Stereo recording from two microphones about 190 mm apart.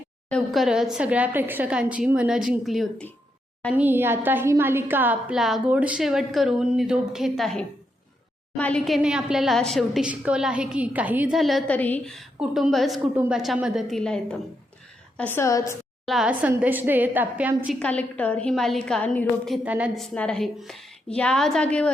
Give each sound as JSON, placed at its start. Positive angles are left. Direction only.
{"t": 0.3, "sound": "a woman's voice", "side_deg": 0}
{"t": 16.0, "sound": "a woman's voice", "side_deg": -5}
{"t": 17.7, "sound": "a woman's voice", "side_deg": 5}
{"t": 19.6, "sound": "a woman's voice", "side_deg": -5}
{"t": 20.1, "sound": "a woman's voice", "side_deg": 5}